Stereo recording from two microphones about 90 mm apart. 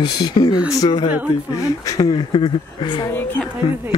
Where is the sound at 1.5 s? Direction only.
40° left (ahead or behind).